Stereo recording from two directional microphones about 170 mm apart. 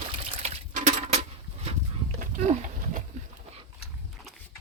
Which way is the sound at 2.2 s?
45° right (ahead or behind).